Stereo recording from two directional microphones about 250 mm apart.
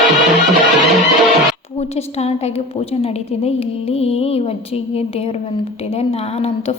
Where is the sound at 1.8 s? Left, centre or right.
Left.